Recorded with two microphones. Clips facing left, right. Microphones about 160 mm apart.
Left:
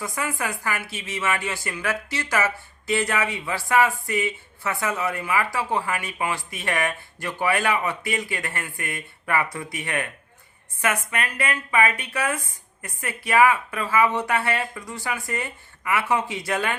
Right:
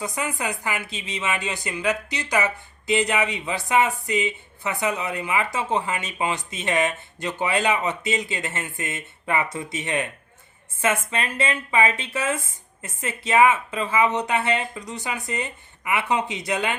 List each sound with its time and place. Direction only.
0.0 s speech: 20° right (ahead or behind)